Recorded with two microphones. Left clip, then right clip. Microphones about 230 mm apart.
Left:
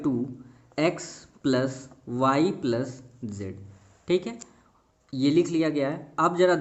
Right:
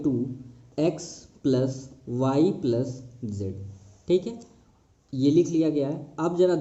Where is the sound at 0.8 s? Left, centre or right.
Left.